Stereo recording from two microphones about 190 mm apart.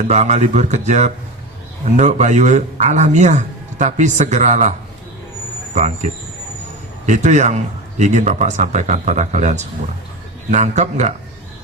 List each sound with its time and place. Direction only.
0.1 s a man's voice: 35° right (ahead or behind)
5.7 s a man's voice: 35° right (ahead or behind)